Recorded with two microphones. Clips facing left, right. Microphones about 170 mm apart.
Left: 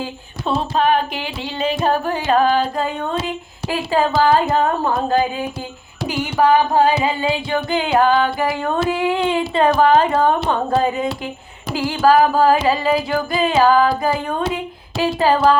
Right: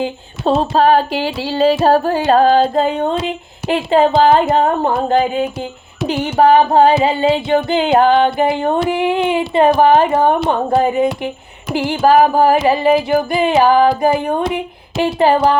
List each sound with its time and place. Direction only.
0.4 s music: 35° right (ahead or behind); by 15.5 s 20° right (ahead or behind)